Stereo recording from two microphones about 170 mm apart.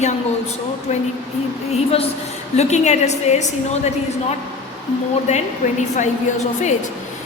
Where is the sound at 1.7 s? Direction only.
35° left (ahead or behind).